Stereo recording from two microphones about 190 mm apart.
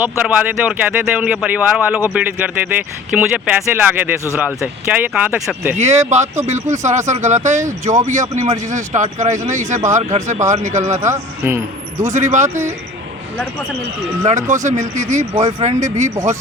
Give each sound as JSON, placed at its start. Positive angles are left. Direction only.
{"t": 0.0, "sound": "speech", "side_deg": -5}
{"t": 5.7, "sound": "speech", "side_deg": -35}
{"t": 11.0, "sound": "speech", "side_deg": -15}
{"t": 12.0, "sound": "speech", "side_deg": -40}
{"t": 14.3, "sound": "speech", "side_deg": -40}